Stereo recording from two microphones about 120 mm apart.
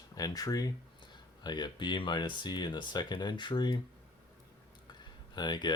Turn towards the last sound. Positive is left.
turn(degrees=40)  # may be behind; listen again after turning